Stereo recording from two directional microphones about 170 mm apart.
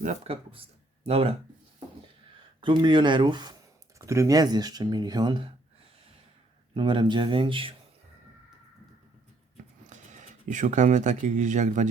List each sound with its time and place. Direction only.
0.0 s speech: 40° right (ahead or behind)
2.6 s speech: 25° right (ahead or behind)
6.7 s speech: 30° right (ahead or behind)
9.8 s speech: 45° right (ahead or behind)